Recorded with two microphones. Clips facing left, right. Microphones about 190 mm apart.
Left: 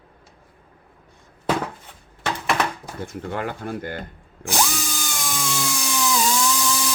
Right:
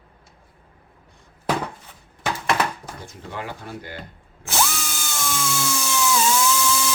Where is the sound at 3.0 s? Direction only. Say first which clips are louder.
Left 7 dB; 55° left (ahead or behind).